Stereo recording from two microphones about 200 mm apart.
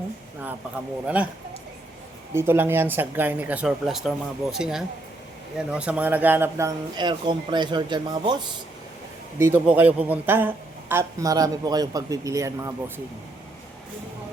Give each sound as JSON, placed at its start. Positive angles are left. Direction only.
{"t": 1.0, "sound": "speech", "side_deg": -5}
{"t": 2.3, "sound": "speech", "side_deg": -10}
{"t": 9.4, "sound": "speech", "side_deg": -10}